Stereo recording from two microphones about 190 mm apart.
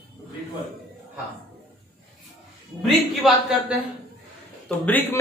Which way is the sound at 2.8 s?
Centre (ahead or behind).